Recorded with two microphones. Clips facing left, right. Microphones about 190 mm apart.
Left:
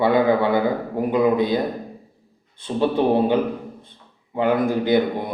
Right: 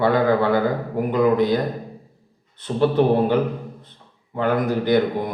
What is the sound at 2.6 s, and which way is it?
Speech, 15° left (ahead or behind).